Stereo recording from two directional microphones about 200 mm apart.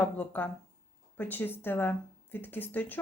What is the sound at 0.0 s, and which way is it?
Speech, 10° left (ahead or behind).